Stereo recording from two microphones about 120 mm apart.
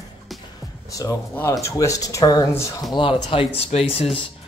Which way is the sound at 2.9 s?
45° left (ahead or behind).